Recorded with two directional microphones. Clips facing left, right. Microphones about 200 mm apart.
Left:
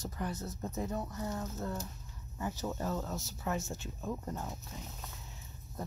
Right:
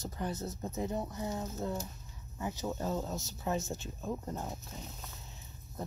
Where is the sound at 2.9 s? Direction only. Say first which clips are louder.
Right 1 dB; 20° right (ahead or behind).